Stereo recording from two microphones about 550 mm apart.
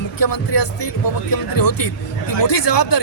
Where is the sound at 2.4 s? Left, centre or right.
Left.